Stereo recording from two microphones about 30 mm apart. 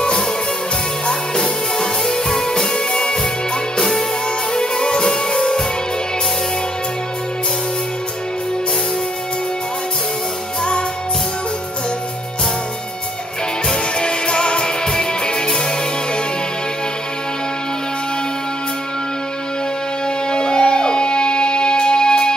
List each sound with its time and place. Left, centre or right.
1.0 s music: left
2.0 s music: centre
4.6 s music: left
13.9 s music: left
20.2 s music: left